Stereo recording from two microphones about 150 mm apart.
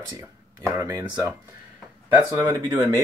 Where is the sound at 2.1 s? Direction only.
15° right (ahead or behind).